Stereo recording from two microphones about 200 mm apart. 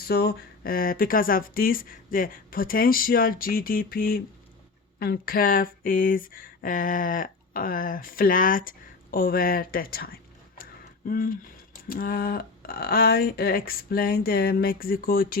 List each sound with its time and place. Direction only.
0.0 s speech: 50° left (ahead or behind)